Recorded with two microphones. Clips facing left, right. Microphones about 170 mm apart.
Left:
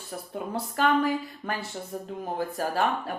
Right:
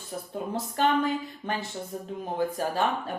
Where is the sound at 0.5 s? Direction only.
20° right (ahead or behind).